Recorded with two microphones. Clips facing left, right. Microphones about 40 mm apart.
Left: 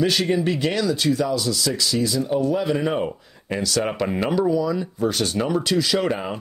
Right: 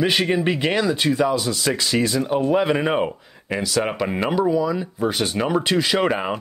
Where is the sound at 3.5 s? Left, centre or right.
Centre.